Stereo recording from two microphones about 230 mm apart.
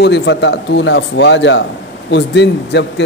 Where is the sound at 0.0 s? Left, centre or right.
Left.